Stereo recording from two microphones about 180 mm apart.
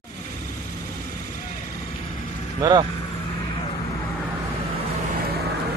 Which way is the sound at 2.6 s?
25° right (ahead or behind).